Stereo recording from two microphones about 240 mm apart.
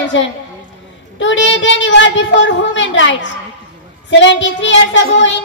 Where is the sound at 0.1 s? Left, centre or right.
Left.